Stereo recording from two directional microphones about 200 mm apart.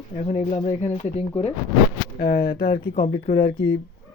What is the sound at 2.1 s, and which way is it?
Speech, 45° left (ahead or behind).